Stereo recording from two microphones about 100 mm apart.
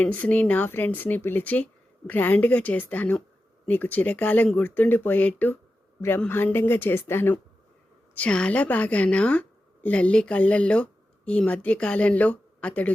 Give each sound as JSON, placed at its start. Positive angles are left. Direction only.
{"t": 0.0, "sound": "a woman's voice", "side_deg": 15}
{"t": 8.1, "sound": "speech", "side_deg": 10}